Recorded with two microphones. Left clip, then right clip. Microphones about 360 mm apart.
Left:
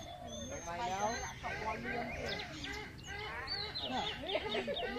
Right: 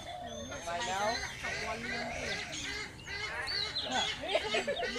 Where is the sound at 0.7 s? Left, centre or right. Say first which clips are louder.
Right 4 dB; right.